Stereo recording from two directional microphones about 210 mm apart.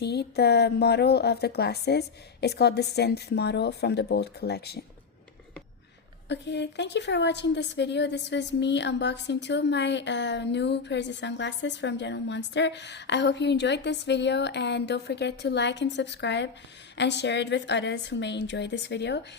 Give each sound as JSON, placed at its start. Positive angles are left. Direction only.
{"t": 0.0, "sound": "a woman's voice", "side_deg": 50}
{"t": 6.2, "sound": "a woman's voice", "side_deg": 55}